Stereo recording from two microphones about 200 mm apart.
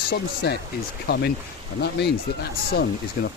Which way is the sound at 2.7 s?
50° left (ahead or behind).